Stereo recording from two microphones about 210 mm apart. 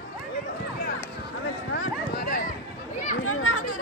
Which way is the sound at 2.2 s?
45° left (ahead or behind).